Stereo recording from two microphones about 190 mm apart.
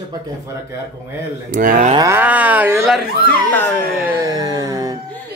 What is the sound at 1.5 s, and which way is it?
Speech, 45° right (ahead or behind).